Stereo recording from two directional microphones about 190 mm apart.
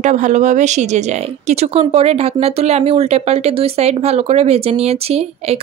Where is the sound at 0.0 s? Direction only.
40° right (ahead or behind).